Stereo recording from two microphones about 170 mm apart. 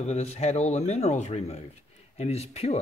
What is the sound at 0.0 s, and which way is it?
Speech, 40° left (ahead or behind).